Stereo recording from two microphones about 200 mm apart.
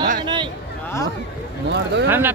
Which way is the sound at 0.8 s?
15° left (ahead or behind).